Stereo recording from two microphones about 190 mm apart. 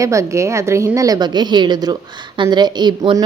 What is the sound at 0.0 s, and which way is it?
A woman's voice, 15° right (ahead or behind).